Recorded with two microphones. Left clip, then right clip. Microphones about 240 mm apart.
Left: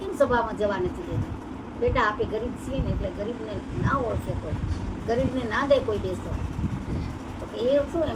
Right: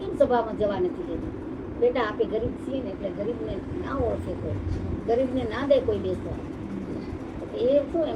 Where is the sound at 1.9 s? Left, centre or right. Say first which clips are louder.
Left 2 dB; centre.